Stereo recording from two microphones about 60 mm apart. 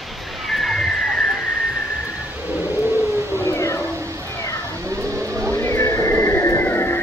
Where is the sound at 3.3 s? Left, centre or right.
Left.